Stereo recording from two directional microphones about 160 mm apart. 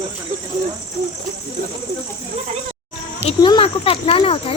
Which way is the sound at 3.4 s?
30° left (ahead or behind).